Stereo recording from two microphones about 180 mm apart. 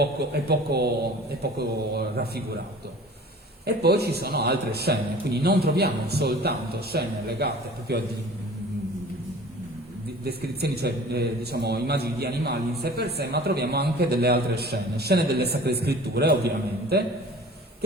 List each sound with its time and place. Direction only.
0.0 s a man's voice: 65° right (ahead or behind)
3.7 s a man's voice: 60° right (ahead or behind)
10.2 s a man's voice: 60° right (ahead or behind)